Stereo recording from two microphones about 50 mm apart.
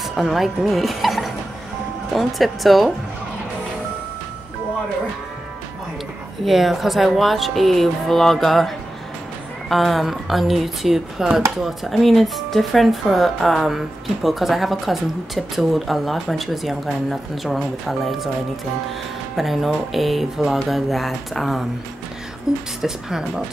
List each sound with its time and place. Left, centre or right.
0.0 s speech: centre
6.4 s speech: centre
19.3 s speech: centre
22.8 s speech: centre